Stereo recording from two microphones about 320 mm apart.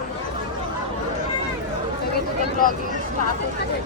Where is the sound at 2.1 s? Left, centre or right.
Left.